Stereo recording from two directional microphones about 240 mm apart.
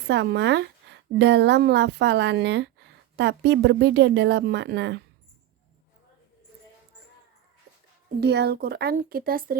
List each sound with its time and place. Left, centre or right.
0.1 s speech: right
8.2 s speech: right